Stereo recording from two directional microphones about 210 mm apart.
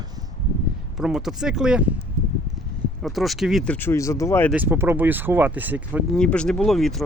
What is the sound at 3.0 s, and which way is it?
Speech, centre (ahead or behind).